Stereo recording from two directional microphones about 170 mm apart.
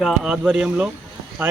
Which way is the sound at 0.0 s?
5° right (ahead or behind).